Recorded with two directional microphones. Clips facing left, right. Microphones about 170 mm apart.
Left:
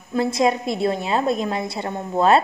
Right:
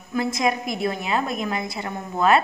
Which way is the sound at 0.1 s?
30° left (ahead or behind).